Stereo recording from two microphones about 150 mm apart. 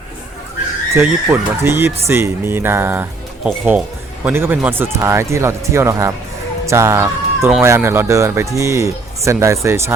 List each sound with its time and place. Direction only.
1.0 s speech: 15° right (ahead or behind)